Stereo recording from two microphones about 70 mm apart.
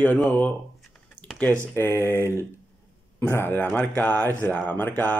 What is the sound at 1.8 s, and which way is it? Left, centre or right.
Speech, left.